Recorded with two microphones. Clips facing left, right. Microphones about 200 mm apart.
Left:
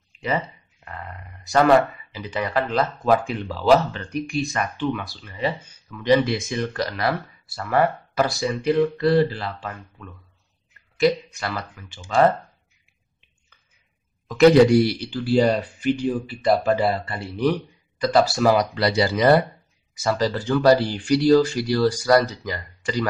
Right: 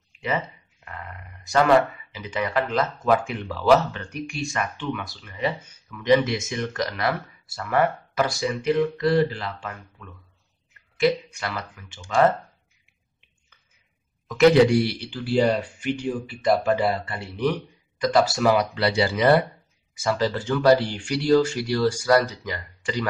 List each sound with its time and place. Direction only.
2.1 s speech: 35° left (ahead or behind)
14.2 s speech: 35° left (ahead or behind)